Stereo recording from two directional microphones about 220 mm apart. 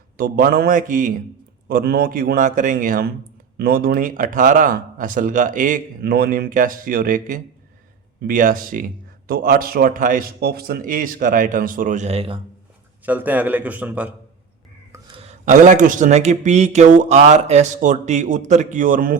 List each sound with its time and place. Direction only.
0.2 s speech: 45° right (ahead or behind); by 12.4 s 25° right (ahead or behind)
13.1 s a man's voice: 5° right (ahead or behind)
14.9 s speech: 20° right (ahead or behind); by 19.1 s 35° right (ahead or behind)